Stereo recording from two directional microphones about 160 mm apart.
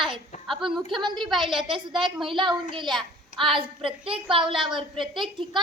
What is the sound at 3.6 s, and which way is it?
Speech, 35° right (ahead or behind).